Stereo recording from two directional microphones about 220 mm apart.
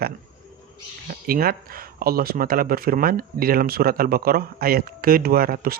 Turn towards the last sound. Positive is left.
turn(degrees=-40)  # may be behind; listen again after turning